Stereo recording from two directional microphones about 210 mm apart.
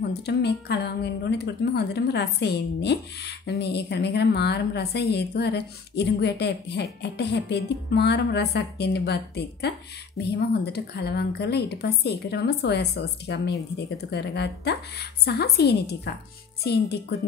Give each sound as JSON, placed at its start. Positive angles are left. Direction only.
{"t": 0.2, "sound": "speech", "side_deg": 55}